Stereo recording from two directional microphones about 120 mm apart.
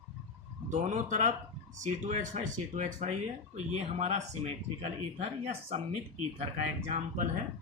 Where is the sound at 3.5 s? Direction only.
75° right (ahead or behind).